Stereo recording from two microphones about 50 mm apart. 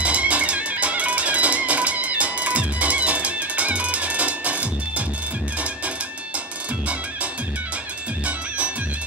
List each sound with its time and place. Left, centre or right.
0.0 s music: right
8.3 s music: right